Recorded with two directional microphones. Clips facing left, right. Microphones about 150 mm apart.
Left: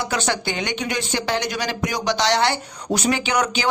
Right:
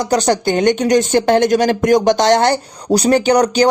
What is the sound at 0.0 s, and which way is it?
Speech, 40° right (ahead or behind).